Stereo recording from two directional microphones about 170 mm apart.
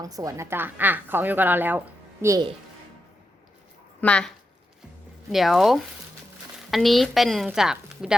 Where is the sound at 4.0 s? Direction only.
5° left (ahead or behind).